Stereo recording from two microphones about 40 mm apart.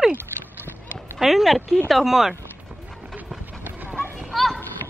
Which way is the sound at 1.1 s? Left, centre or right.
Centre.